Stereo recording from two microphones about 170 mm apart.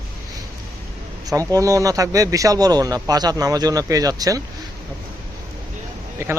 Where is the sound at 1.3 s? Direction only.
20° right (ahead or behind).